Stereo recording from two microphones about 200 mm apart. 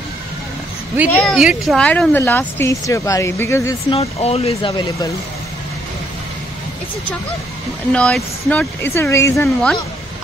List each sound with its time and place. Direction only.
1.1 s speech: centre (ahead or behind)
3.9 s speech: 30° left (ahead or behind)
7.9 s speech: 5° left (ahead or behind)